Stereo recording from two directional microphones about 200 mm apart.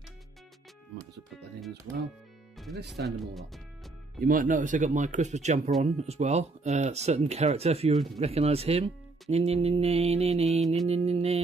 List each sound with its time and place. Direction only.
3.1 s speech: centre (ahead or behind)
4.2 s speech: 45° right (ahead or behind)
7.9 s speech: centre (ahead or behind)
8.2 s speech: 30° right (ahead or behind)